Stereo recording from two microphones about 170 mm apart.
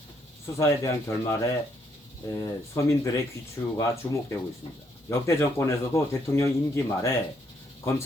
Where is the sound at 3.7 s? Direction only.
20° left (ahead or behind).